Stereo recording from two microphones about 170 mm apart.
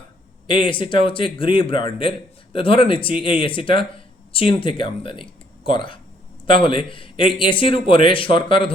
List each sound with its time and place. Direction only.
0.4 s a man's voice: 30° left (ahead or behind)